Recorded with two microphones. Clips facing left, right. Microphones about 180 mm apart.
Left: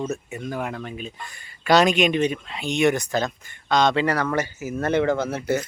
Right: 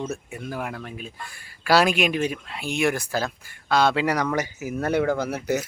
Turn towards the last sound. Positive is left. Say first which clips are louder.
# left 1 dB
turn(degrees=-10)  # may be behind; listen again after turning